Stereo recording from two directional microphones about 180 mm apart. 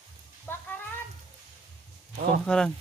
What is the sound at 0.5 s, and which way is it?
Speech, 15° left (ahead or behind).